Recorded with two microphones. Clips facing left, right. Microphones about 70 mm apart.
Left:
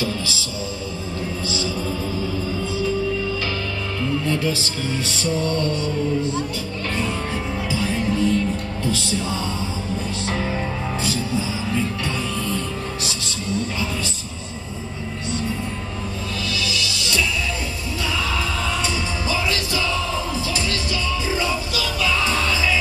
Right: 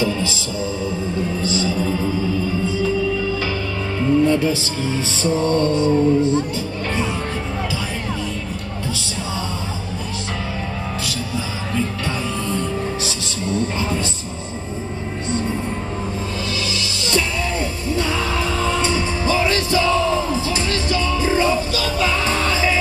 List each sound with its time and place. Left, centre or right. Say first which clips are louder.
1.5 s music: right 4 dB; right
4.0 s music: right 7 dB; right
18.8 s music: right 4 dB; right